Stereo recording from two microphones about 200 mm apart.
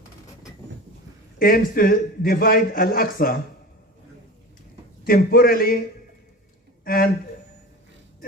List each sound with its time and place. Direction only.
1.4 s a man's voice: 45° left (ahead or behind)
5.0 s a man's voice: 45° left (ahead or behind)
6.8 s speech: 45° left (ahead or behind)